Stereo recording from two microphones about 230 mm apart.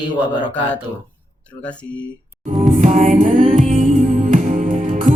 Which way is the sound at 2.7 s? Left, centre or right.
Right.